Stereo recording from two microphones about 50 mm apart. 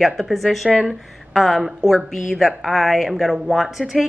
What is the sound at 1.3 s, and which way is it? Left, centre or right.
Speech, centre.